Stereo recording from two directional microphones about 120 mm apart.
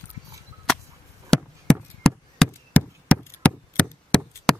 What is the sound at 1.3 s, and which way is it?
Chop, 5° left (ahead or behind).